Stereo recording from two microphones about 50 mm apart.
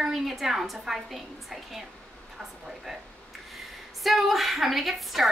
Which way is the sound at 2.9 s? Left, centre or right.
Centre.